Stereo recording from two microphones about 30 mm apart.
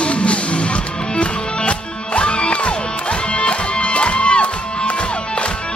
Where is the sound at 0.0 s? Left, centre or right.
Left.